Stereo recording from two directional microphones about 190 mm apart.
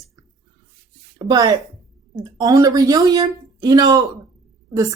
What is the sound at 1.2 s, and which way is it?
A woman's voice, 20° right (ahead or behind).